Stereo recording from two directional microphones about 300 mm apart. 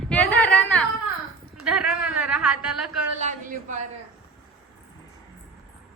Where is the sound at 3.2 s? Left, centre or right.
Right.